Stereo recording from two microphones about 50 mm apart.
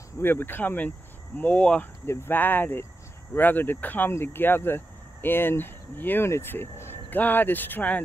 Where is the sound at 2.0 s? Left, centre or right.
Left.